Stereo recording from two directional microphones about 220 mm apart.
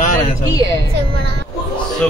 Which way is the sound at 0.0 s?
35° left (ahead or behind).